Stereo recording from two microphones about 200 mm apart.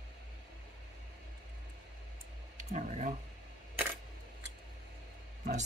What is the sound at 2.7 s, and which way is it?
Speech, 40° right (ahead or behind).